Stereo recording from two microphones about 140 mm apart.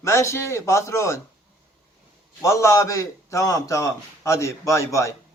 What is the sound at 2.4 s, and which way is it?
A man's voice, 20° left (ahead or behind).